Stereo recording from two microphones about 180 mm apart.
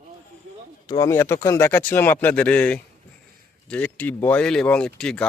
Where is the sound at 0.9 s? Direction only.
15° left (ahead or behind).